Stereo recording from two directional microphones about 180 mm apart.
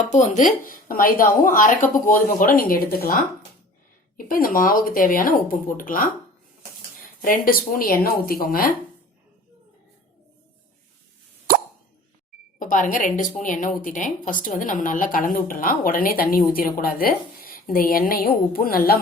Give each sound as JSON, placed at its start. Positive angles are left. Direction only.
{"t": 0.0, "sound": "a woman's voice", "side_deg": 40}
{"t": 4.3, "sound": "a woman's voice", "side_deg": 50}
{"t": 12.5, "sound": "a woman's voice", "side_deg": 45}